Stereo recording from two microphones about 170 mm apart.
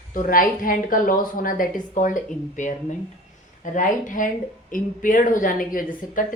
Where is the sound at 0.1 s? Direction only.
55° left (ahead or behind).